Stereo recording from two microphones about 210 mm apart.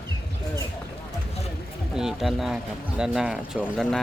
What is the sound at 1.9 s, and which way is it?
Speech, centre (ahead or behind).